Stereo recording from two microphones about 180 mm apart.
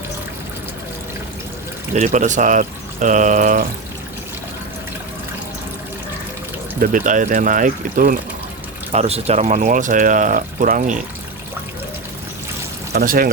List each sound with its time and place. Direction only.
2.0 s speech: 45° right (ahead or behind)
6.8 s speech: 45° right (ahead or behind)
8.9 s speech: 35° right (ahead or behind)
12.9 s speech: 55° right (ahead or behind)